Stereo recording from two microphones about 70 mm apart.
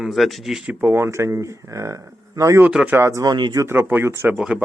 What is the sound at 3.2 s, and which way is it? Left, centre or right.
Speech, right.